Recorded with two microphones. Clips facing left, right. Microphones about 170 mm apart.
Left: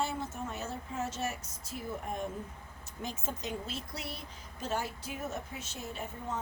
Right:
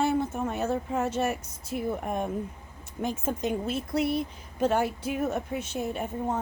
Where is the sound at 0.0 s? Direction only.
60° right (ahead or behind).